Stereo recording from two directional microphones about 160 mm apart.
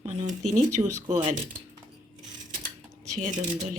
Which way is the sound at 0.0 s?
40° right (ahead or behind).